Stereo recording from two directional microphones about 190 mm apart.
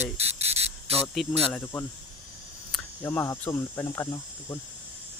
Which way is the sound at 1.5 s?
10° left (ahead or behind).